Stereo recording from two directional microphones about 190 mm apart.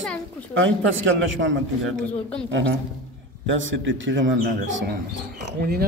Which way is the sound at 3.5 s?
85° right.